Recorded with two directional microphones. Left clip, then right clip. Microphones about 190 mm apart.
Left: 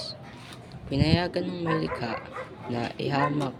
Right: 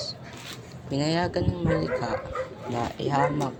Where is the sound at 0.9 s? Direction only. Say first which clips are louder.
Even; 15° left (ahead or behind).